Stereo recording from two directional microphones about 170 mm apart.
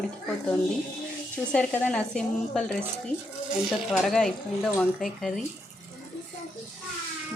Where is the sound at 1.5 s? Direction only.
5° left (ahead or behind).